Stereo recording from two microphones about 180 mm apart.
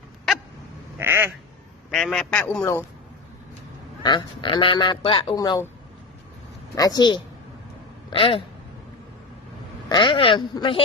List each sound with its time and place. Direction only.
0.9 s quack: 15° right (ahead or behind)
1.9 s a man's voice: 5° left (ahead or behind)
4.0 s a man's voice: 25° left (ahead or behind)
6.7 s a man's voice: 20° left (ahead or behind)
9.9 s a man's voice: 25° left (ahead or behind)